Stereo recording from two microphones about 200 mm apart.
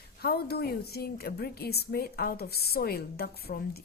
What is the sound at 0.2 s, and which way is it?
A woman's voice, 55° left (ahead or behind).